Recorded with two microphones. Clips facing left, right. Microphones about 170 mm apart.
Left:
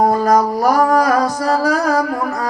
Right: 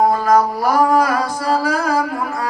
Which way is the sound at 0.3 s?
45° left (ahead or behind).